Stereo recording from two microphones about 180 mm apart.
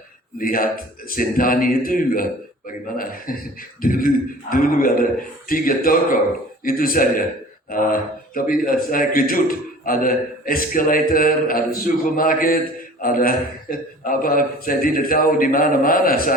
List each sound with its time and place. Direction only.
0.3 s a man's voice: 50° left (ahead or behind)
3.3 s a man's voice: 50° left (ahead or behind)